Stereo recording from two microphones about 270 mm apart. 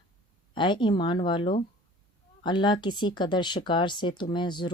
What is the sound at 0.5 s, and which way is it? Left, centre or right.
Speech, centre.